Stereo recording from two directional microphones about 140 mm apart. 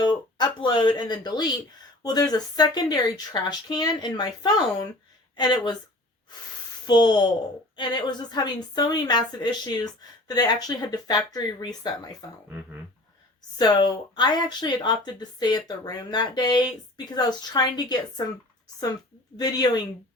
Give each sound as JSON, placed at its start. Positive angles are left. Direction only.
{"t": 0.0, "sound": "a woman's voice", "side_deg": 30}
{"t": 6.8, "sound": "a woman's voice", "side_deg": 30}
{"t": 13.6, "sound": "a woman's voice", "side_deg": 30}
{"t": 19.4, "sound": "a woman's voice", "side_deg": 30}